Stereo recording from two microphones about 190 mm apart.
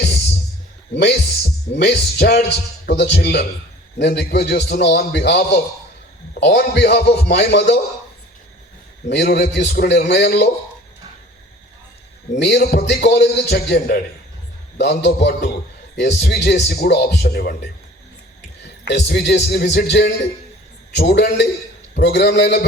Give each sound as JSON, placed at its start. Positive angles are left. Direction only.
{"t": 0.9, "sound": "a man's voice", "side_deg": 65}
{"t": 9.0, "sound": "a man's voice", "side_deg": 60}
{"t": 12.4, "sound": "a man's voice", "side_deg": 65}
{"t": 18.6, "sound": "a man's voice", "side_deg": 65}